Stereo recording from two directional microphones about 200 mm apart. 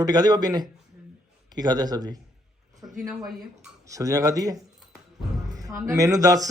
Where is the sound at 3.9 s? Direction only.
15° right (ahead or behind).